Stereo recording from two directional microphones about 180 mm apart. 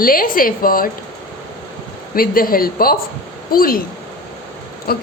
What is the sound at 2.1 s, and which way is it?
A man's voice, 55° left (ahead or behind).